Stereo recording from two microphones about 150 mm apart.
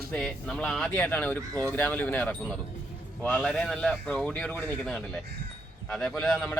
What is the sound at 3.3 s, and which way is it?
A man's voice, centre (ahead or behind).